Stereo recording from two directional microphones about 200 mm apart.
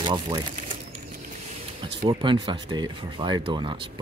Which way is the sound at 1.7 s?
25° right (ahead or behind).